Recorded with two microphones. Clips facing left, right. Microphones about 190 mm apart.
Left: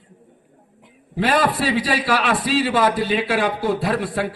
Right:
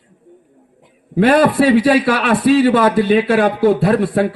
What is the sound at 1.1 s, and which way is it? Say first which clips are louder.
A man's voice: right 8 dB; 60° right (ahead or behind).